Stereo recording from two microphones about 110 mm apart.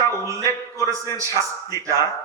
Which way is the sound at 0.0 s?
30° right (ahead or behind).